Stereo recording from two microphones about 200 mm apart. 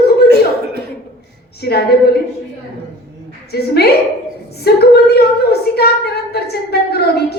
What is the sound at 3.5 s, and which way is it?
A woman's voice, 55° left (ahead or behind).